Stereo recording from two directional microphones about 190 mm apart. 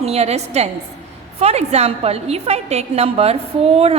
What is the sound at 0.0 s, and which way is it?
A woman's voice, 35° right (ahead or behind).